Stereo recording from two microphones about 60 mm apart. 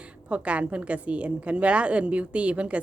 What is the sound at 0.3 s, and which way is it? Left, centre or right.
A woman's voice, right.